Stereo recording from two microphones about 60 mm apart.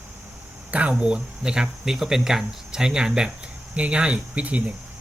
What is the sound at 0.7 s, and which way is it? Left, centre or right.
Speech, right.